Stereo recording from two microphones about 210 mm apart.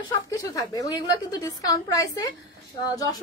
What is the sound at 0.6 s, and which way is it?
A woman's voice, 20° left (ahead or behind).